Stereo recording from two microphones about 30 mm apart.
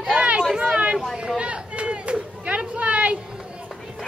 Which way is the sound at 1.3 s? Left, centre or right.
Right.